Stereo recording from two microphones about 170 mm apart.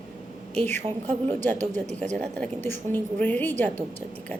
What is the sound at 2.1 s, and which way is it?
A woman's voice, 5° left (ahead or behind).